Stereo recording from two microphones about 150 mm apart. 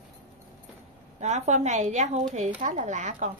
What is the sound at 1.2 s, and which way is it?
A woman's voice, 50° right (ahead or behind).